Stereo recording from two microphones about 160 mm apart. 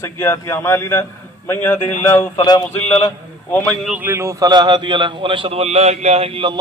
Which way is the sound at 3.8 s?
5° right (ahead or behind).